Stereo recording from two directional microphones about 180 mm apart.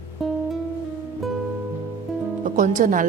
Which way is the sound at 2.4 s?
45° right (ahead or behind).